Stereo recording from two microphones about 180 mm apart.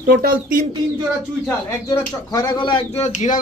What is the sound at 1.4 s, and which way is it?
Speech, 15° left (ahead or behind).